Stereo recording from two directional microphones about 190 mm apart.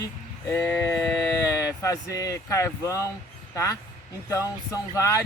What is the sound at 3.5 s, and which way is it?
Speech, 15° left (ahead or behind).